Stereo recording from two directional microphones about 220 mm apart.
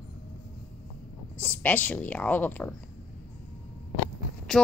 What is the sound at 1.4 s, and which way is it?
A woman's voice, 5° left (ahead or behind).